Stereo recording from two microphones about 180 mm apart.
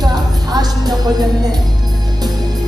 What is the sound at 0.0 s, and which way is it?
Music, 20° right (ahead or behind).